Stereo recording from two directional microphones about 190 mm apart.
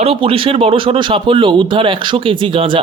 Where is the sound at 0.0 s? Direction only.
30° right (ahead or behind).